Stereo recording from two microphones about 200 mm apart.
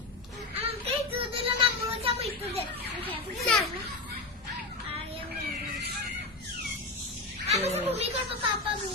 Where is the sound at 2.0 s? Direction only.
30° right (ahead or behind).